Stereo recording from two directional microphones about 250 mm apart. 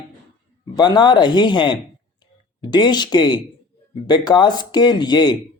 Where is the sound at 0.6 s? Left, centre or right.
Centre.